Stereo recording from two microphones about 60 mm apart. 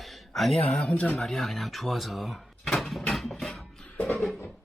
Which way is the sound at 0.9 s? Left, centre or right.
Left.